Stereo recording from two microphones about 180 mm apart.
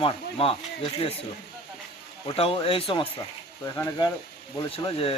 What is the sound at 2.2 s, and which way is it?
Speech, 30° left (ahead or behind).